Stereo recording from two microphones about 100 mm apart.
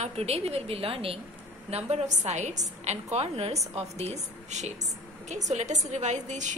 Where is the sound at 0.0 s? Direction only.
90° right; by 1.2 s 70° right (ahead or behind).